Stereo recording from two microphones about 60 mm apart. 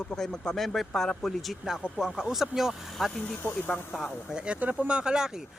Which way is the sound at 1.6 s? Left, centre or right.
Centre.